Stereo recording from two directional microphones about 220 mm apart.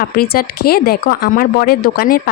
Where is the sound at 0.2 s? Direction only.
45° left (ahead or behind).